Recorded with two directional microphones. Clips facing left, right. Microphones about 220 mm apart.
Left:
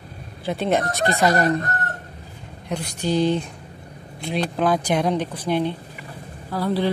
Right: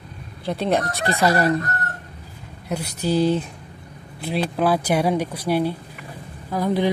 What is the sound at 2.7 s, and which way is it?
Speech, 5° right (ahead or behind).